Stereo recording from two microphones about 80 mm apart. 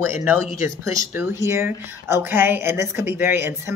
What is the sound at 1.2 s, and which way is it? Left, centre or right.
Speech, right.